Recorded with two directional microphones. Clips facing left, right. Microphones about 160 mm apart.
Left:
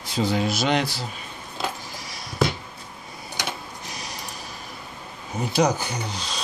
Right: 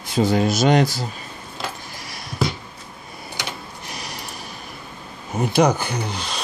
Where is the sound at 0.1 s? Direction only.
50° right (ahead or behind).